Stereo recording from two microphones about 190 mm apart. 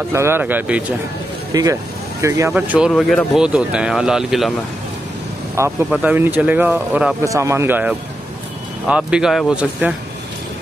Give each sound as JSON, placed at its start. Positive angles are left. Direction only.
{"t": 0.1, "sound": "speech", "side_deg": -15}
{"t": 1.5, "sound": "speech", "side_deg": -20}
{"t": 5.9, "sound": "speech", "side_deg": -5}